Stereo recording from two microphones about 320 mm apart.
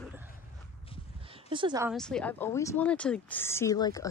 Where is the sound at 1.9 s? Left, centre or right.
Centre.